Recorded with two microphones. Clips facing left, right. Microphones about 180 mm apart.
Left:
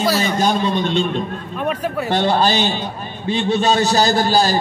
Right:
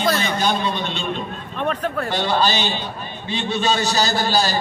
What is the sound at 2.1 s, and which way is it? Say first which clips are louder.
A man's voice: left 5 dB; 55° left (ahead or behind).